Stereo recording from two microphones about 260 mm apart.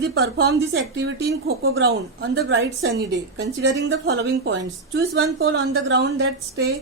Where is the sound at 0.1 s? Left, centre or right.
Right.